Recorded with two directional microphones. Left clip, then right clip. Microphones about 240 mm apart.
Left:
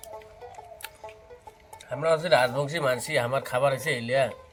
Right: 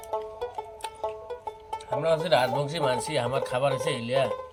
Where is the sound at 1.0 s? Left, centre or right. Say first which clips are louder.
Right 11 dB; right.